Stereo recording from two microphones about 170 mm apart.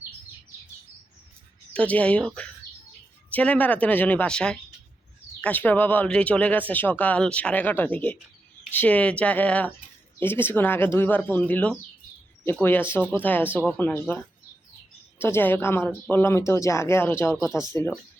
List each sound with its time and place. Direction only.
1.7 s speech: 10° left (ahead or behind)
15.2 s speech: 10° left (ahead or behind)